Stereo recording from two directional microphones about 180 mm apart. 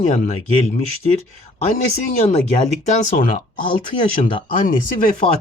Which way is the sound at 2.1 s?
35° left (ahead or behind).